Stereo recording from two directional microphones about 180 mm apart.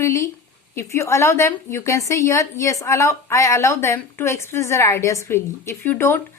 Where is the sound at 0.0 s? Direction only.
15° left (ahead or behind).